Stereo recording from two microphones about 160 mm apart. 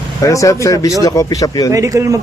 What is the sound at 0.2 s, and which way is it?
Speech, 20° left (ahead or behind).